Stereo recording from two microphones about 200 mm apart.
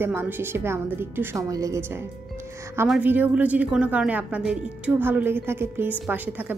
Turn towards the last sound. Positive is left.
turn(degrees=-10)  # may be behind; listen again after turning